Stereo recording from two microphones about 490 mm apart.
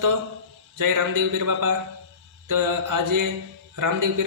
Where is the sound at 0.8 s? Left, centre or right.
Right.